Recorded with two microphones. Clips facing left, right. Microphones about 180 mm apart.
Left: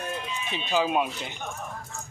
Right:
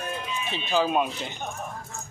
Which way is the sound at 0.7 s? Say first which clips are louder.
Right 1 dB; 5° left (ahead or behind).